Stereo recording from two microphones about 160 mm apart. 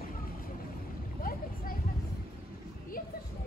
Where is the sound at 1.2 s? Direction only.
65° left (ahead or behind).